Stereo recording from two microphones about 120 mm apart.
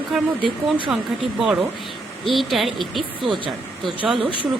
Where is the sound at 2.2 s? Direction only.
Centre (ahead or behind).